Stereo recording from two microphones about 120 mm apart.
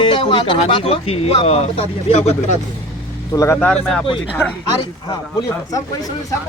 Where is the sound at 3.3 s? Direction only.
25° left (ahead or behind).